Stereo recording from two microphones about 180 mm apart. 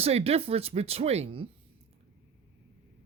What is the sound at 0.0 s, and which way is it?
Speech, 35° right (ahead or behind).